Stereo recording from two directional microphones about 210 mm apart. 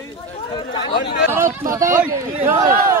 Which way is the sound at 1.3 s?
10° right (ahead or behind).